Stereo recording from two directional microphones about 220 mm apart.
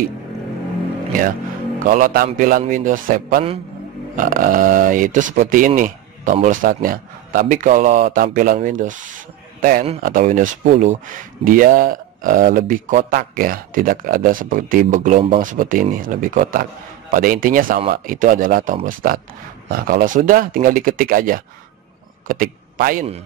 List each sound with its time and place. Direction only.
1.8 s speech: 35° right (ahead or behind)
5.7 s a sound: 35° right (ahead or behind)
6.3 s speech: 35° right (ahead or behind)